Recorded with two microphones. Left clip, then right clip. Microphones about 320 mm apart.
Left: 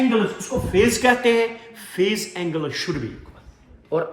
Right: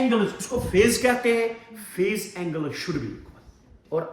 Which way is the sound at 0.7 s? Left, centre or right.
Centre.